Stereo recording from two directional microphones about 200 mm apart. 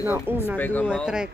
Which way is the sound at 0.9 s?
5° right (ahead or behind).